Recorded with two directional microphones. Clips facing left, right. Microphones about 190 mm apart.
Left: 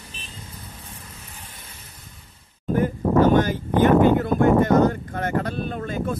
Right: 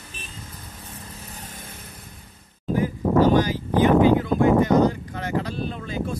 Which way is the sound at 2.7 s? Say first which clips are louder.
Left 1 dB; 50° left (ahead or behind).